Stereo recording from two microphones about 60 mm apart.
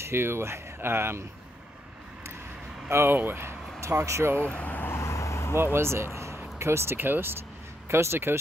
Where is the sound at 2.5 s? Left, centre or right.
Centre.